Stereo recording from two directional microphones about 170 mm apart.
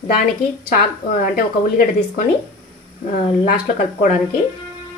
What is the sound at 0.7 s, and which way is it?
Speech, 55° left (ahead or behind).